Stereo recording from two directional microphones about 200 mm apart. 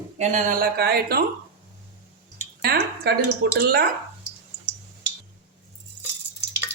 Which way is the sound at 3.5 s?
50° right (ahead or behind).